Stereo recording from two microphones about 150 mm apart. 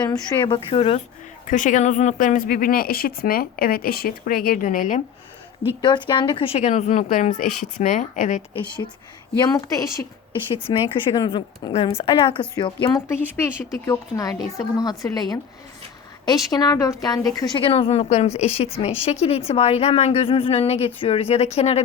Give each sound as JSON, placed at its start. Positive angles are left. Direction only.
{"t": 0.0, "sound": "a woman's voice", "side_deg": 30}
{"t": 1.5, "sound": "speech", "side_deg": 55}
{"t": 5.8, "sound": "a woman's voice", "side_deg": 30}
{"t": 8.5, "sound": "speech", "side_deg": 30}
{"t": 10.5, "sound": "a woman's voice", "side_deg": 35}
{"t": 11.7, "sound": "a woman's voice", "side_deg": 40}
{"t": 17.6, "sound": "a woman's voice", "side_deg": 40}